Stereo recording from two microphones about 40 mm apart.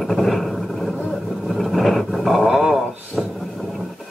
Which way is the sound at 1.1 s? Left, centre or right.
Centre.